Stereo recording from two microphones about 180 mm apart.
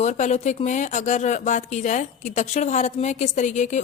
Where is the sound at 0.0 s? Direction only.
40° left (ahead or behind).